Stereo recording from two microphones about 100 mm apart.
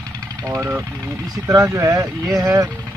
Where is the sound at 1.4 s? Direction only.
30° right (ahead or behind).